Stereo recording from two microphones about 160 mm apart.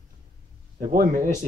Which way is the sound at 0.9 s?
60° right (ahead or behind).